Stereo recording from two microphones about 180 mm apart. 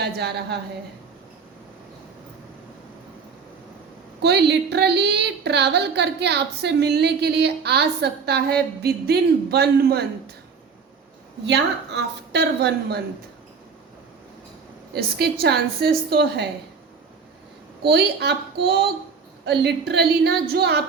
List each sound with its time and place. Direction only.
0.0 s a woman's voice: 65° right (ahead or behind)
4.2 s a woman's voice: 65° right (ahead or behind)
11.4 s a woman's voice: 75° right (ahead or behind)
14.9 s a woman's voice: 60° right (ahead or behind)
17.8 s a woman's voice: 65° right (ahead or behind)
19.5 s a woman's voice: 70° right (ahead or behind)